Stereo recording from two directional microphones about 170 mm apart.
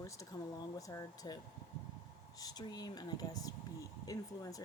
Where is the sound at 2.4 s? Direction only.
25° left (ahead or behind).